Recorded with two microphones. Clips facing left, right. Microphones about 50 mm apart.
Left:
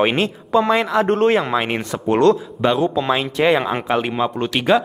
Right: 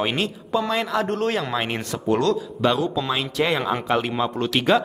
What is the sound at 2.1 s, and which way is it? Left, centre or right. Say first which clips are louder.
Speech: left 6 dB; left.